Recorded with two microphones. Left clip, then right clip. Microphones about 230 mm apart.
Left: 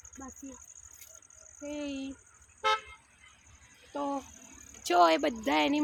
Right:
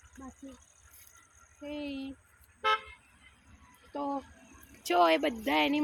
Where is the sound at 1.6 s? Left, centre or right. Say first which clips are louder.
Left 1 dB; centre.